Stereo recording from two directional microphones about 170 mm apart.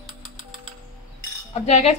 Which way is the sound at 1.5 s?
40° left (ahead or behind).